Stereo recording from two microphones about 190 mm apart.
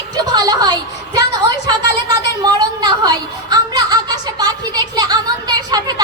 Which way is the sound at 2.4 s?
20° right (ahead or behind).